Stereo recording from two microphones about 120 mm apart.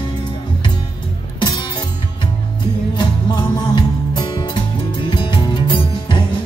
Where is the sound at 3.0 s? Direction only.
40° left (ahead or behind).